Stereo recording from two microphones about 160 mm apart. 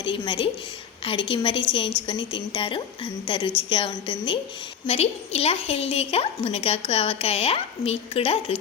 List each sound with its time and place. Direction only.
0.0 s a woman's voice: 30° left (ahead or behind)